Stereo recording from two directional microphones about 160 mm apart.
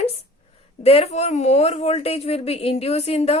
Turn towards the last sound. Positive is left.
turn(degrees=40)  # may be behind; listen again after turning